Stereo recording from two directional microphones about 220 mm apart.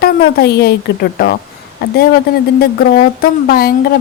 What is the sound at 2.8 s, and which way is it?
Speech, 40° left (ahead or behind).